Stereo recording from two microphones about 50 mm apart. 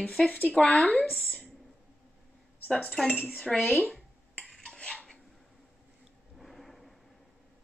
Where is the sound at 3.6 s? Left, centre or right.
Centre.